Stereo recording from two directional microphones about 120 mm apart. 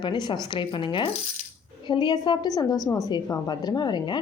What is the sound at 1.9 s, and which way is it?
Speech, 40° left (ahead or behind).